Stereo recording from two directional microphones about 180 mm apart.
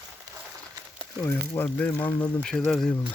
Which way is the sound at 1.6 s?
10° left (ahead or behind).